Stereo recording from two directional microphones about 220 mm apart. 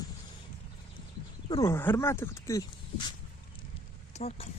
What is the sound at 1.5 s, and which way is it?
Speech, 15° left (ahead or behind).